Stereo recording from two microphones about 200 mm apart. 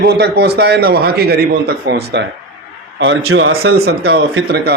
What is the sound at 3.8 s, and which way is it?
Speech, 65° right (ahead or behind).